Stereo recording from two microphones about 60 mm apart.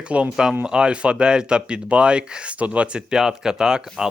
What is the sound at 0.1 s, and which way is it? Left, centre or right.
Speech, centre.